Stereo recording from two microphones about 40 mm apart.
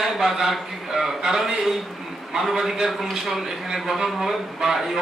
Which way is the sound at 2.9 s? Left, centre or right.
Centre.